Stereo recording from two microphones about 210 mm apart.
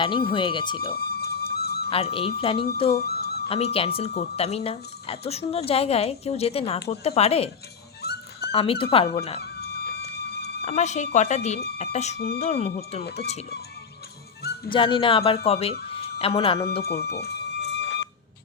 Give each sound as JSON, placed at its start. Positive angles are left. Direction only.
{"t": 0.0, "sound": "speech", "side_deg": 25}
{"t": 0.9, "sound": "music", "side_deg": 50}
{"t": 1.9, "sound": "speech", "side_deg": 25}
{"t": 2.9, "sound": "music", "side_deg": 50}
{"t": 3.5, "sound": "speech", "side_deg": 25}
{"t": 8.0, "sound": "dog", "side_deg": 50}
{"t": 8.5, "sound": "speech", "side_deg": 25}
{"t": 9.4, "sound": "music", "side_deg": 50}
{"t": 10.7, "sound": "speech", "side_deg": 35}
{"t": 12.1, "sound": "speech", "side_deg": 50}
{"t": 12.4, "sound": "speech", "side_deg": 30}
{"t": 14.7, "sound": "speech", "side_deg": 25}
{"t": 15.9, "sound": "a sound", "side_deg": 30}
{"t": 16.8, "sound": "music", "side_deg": 50}